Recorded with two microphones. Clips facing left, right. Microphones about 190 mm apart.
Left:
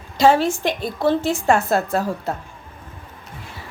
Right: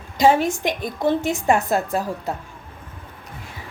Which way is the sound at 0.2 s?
15° right (ahead or behind).